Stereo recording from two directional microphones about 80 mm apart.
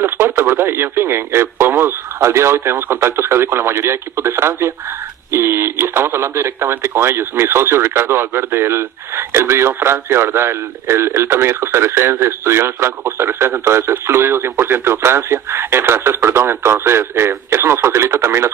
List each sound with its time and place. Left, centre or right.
0.0 s speech: right